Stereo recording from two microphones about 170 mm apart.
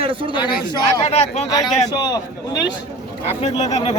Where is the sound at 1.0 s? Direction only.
40° left (ahead or behind).